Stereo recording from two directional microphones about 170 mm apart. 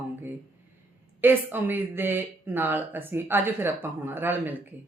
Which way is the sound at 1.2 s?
10° right (ahead or behind).